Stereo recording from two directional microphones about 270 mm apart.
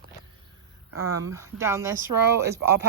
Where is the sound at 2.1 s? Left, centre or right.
Right.